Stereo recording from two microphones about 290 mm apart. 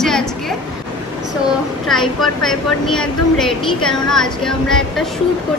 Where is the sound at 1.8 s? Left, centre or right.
Centre.